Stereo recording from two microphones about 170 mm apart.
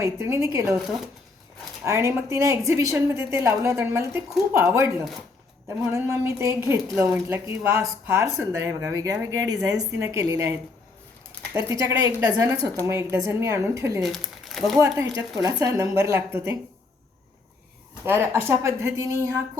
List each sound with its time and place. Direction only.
0.0 s speech: 15° right (ahead or behind)
1.8 s speech: 15° right (ahead or behind)
11.7 s speech: 20° right (ahead or behind)
14.0 s speech: centre (ahead or behind)
14.8 s speech: 20° right (ahead or behind)
18.0 s speech: 15° right (ahead or behind)